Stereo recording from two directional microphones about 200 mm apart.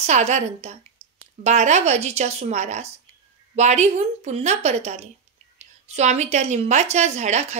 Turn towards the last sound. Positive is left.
turn(degrees=-35)  # may be behind; listen again after turning